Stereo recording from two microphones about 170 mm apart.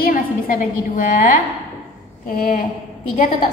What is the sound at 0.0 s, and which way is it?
A woman's voice, 55° left (ahead or behind).